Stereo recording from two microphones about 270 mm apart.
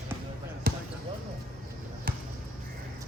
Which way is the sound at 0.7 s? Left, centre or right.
Right.